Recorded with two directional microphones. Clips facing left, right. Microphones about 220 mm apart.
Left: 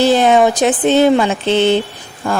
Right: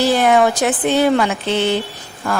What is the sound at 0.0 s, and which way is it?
Speech, 20° left (ahead or behind).